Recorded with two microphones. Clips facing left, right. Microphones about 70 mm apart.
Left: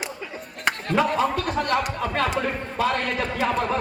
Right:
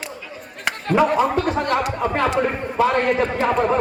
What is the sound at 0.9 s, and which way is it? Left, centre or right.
A man's voice, right.